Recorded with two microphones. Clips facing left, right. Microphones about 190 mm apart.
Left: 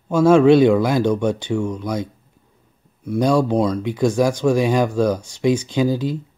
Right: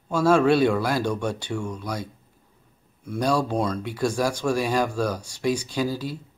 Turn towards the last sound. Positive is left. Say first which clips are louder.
# left 7 dB
turn(degrees=20)  # may be behind; listen again after turning